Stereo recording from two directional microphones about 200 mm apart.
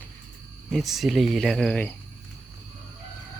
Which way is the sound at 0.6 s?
Centre (ahead or behind).